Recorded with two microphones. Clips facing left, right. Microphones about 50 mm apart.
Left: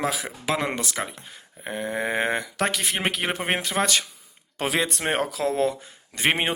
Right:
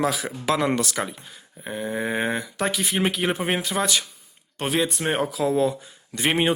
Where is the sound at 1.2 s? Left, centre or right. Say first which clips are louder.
Left 1 dB; left.